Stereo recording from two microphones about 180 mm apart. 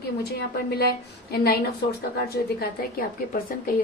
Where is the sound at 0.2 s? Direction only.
60° left (ahead or behind).